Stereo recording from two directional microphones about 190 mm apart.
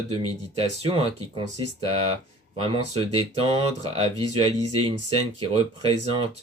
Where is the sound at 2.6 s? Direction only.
25° right (ahead or behind).